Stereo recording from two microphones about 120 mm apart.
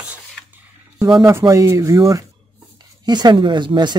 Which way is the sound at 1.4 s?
30° right (ahead or behind).